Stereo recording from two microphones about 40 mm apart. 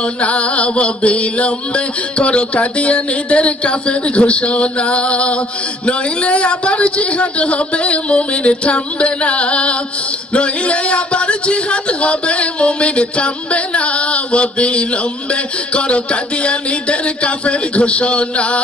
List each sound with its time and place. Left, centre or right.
0.0 s music: left
5.9 s a man's voice: left